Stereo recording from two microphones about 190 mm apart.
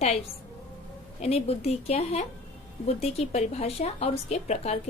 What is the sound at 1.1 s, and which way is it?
A woman's voice, 35° left (ahead or behind).